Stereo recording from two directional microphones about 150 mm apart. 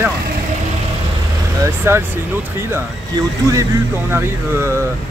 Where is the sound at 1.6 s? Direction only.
15° right (ahead or behind).